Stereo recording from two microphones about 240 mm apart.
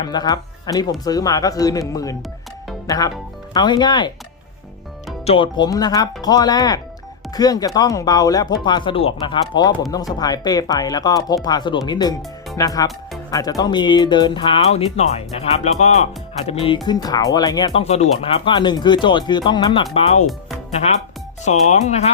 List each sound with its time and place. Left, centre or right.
0.0 s speech: centre
5.2 s speech: left
21.4 s speech: left